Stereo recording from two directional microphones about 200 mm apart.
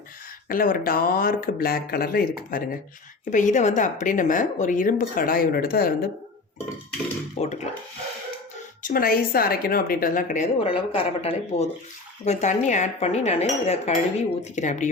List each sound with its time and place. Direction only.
0.4 s a woman's voice: 45° left (ahead or behind)
7.3 s speech: 35° left (ahead or behind)
8.8 s a woman's voice: 45° left (ahead or behind)